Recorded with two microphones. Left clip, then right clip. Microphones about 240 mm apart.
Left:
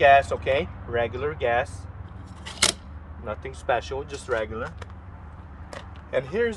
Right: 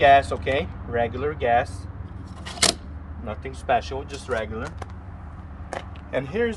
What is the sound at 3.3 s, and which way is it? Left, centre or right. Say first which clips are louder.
Speech: right 2 dB; centre.